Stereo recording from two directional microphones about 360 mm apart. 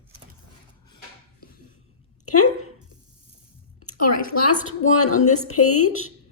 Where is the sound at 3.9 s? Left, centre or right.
Left.